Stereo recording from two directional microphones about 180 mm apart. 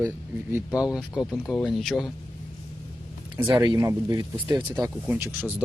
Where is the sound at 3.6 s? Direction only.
20° right (ahead or behind).